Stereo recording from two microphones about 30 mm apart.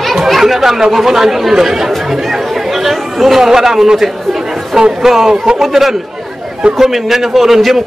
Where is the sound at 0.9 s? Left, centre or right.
Centre.